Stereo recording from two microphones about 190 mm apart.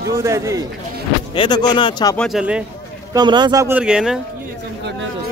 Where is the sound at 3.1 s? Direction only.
20° right (ahead or behind); by 4.1 s 5° right (ahead or behind).